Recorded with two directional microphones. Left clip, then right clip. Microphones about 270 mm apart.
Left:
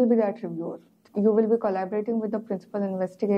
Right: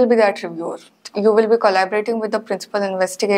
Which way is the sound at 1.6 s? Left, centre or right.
Centre.